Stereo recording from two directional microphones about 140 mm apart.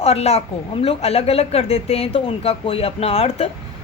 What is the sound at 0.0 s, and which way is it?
A woman's voice, 45° left (ahead or behind).